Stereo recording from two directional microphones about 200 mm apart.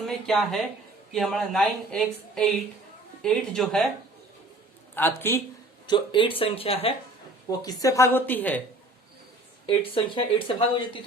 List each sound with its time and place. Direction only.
0.3 s speech: centre (ahead or behind)
4.9 s a woman's voice: 10° left (ahead or behind)
5.9 s speech: 25° left (ahead or behind)
7.6 s a woman's voice: 20° left (ahead or behind)
9.6 s speech: 25° left (ahead or behind)